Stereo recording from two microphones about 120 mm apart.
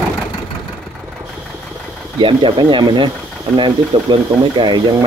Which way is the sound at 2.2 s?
45° right (ahead or behind).